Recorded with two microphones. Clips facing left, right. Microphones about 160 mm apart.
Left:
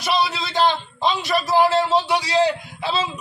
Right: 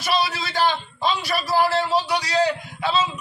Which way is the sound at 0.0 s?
20° left (ahead or behind).